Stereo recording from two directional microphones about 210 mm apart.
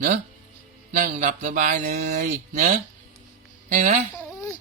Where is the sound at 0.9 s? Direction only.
40° right (ahead or behind).